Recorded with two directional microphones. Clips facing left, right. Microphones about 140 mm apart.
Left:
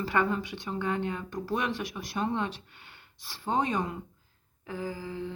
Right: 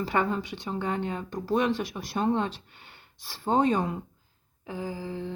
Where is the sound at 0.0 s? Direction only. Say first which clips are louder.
Right 1 dB; 25° right (ahead or behind).